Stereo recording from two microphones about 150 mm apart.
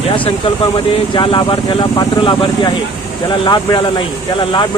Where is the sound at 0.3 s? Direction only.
40° left (ahead or behind).